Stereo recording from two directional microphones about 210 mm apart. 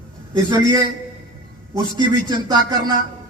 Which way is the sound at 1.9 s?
20° right (ahead or behind).